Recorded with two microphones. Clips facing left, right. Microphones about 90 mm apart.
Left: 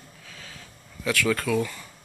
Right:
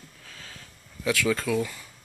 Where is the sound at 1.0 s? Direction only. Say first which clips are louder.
Even; 20° right (ahead or behind).